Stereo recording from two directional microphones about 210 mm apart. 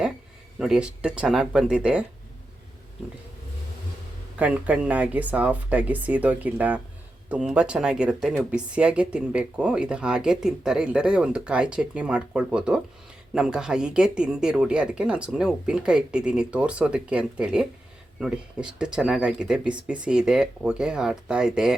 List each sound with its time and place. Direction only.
0.6 s speech: 5° right (ahead or behind)
4.4 s speech: 5° right (ahead or behind)